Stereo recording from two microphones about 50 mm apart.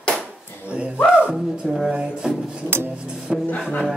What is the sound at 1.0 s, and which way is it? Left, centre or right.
Speech, centre.